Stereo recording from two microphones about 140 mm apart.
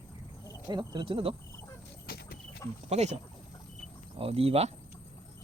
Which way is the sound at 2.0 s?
90° left.